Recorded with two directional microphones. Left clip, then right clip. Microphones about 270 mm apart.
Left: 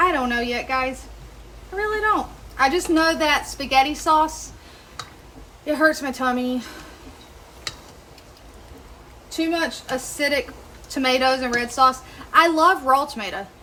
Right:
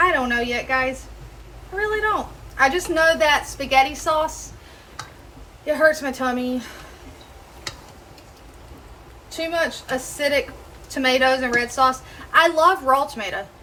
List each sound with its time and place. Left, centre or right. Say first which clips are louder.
0.0 s a sound: right 1 dB; centre
2.6 s a woman's voice: right 1 dB; centre
5.6 s a woman's voice: right 2 dB; centre
9.4 s a woman's voice: even; centre